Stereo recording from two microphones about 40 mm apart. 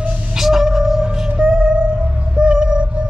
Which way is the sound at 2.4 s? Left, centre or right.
Right.